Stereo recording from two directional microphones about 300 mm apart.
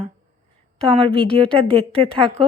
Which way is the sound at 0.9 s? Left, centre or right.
Centre.